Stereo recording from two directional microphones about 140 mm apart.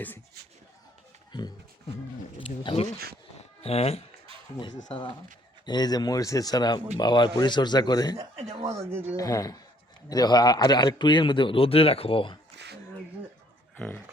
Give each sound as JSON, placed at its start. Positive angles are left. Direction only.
{"t": 2.4, "sound": "a man's voice", "side_deg": 40}
{"t": 5.6, "sound": "a man's voice", "side_deg": 30}
{"t": 8.4, "sound": "speech", "side_deg": -45}
{"t": 8.9, "sound": "speech", "side_deg": -15}
{"t": 9.1, "sound": "a man's voice", "side_deg": 25}
{"t": 13.7, "sound": "speech", "side_deg": 10}